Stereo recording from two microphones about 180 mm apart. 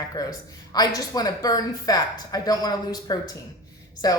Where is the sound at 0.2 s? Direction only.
20° left (ahead or behind).